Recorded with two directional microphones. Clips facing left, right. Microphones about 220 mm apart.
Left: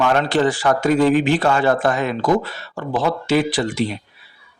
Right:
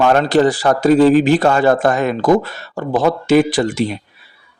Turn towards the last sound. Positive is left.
turn(degrees=-45)  # may be behind; listen again after turning